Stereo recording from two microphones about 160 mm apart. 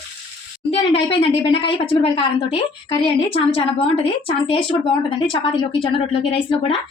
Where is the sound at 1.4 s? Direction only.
35° left (ahead or behind).